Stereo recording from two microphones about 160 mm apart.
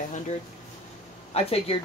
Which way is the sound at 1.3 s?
40° left (ahead or behind).